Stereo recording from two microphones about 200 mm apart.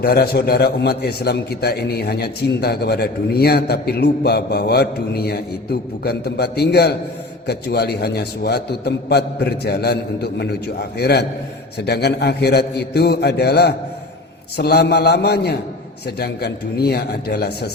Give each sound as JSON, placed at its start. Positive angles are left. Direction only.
{"t": 0.0, "sound": "a man's voice", "side_deg": 50}